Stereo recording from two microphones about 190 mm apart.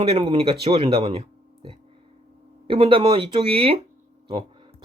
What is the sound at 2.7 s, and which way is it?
Speech, 25° right (ahead or behind).